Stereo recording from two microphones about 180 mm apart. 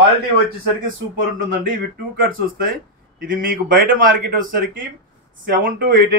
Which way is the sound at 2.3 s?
50° right (ahead or behind).